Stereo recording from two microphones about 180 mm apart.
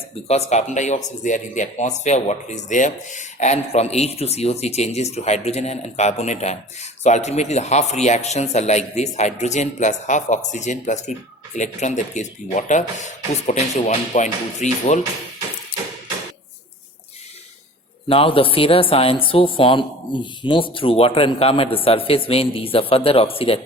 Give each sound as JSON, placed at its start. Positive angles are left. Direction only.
{"t": 0.3, "sound": "speech", "side_deg": 40}
{"t": 18.1, "sound": "speech", "side_deg": 30}